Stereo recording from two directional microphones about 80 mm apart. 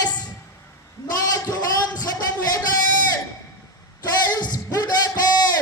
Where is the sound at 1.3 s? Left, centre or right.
Left.